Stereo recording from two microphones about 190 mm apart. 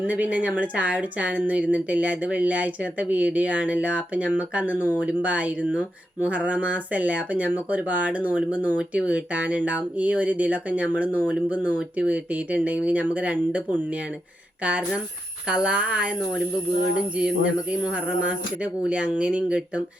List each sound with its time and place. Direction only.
0.0 s a woman's voice: 10° right (ahead or behind)
17.2 s speech: 5° right (ahead or behind)